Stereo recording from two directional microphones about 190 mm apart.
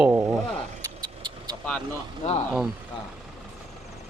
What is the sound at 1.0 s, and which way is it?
Vehicle, 20° right (ahead or behind).